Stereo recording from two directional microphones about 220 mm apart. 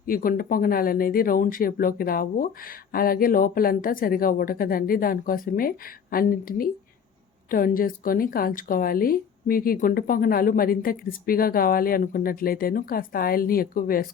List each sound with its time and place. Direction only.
0.0 s speech: 40° left (ahead or behind)